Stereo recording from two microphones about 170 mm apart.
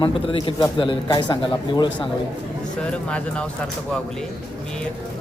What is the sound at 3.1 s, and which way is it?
Speech, 5° left (ahead or behind).